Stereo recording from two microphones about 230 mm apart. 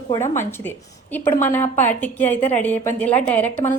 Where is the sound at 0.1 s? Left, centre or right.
Centre.